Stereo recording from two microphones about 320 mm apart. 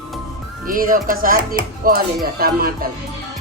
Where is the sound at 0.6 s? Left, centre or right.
Right.